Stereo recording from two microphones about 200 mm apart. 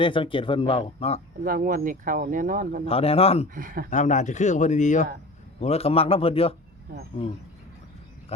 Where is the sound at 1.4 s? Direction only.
45° right (ahead or behind).